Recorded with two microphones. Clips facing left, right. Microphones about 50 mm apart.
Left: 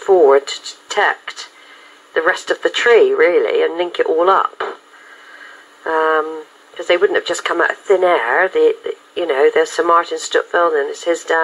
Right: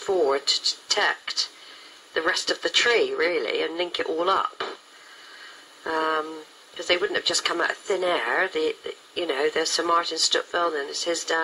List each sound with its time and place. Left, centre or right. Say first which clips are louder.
0.0 s speech: left 12 dB; left
5.9 s a sound: left 10 dB; left
6.8 s speech: left 10 dB; left